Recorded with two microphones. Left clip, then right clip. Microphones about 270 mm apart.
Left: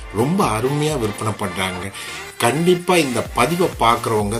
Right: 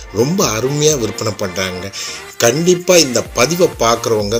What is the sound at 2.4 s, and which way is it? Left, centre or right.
Speech, centre.